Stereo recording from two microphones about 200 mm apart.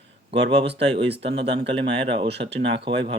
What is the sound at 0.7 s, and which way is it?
Speech, 30° right (ahead or behind).